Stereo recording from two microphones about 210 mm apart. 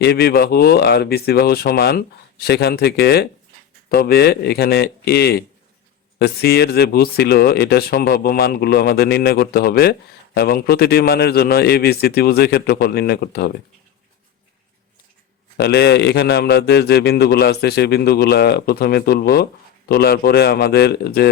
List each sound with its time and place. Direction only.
0.0 s a man's voice: 50° left (ahead or behind)
15.5 s a man's voice: 50° left (ahead or behind)